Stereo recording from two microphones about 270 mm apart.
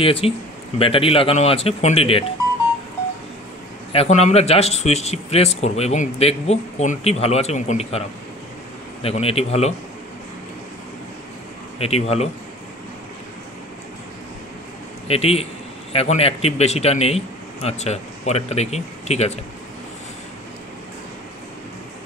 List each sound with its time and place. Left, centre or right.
0.0 s speech: left
3.9 s speech: left
9.0 s speech: left
11.8 s speech: left
15.0 s speech: left